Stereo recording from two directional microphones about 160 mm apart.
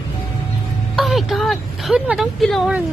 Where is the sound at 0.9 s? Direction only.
Centre (ahead or behind).